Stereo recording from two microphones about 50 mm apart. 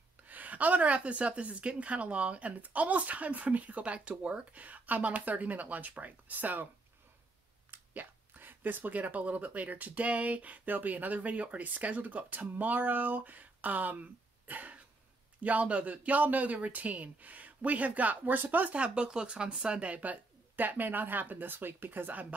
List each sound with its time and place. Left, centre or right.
0.3 s a woman's voice: right
7.7 s speech: right
14.5 s cough: right
15.4 s speech: right
18.8 s speech: centre; by 22.3 s right